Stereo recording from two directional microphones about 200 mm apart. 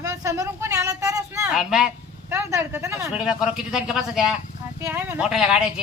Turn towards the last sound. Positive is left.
turn(degrees=-5)  # may be behind; listen again after turning